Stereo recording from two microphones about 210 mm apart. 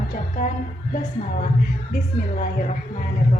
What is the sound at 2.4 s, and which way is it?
A woman's voice, 40° left (ahead or behind).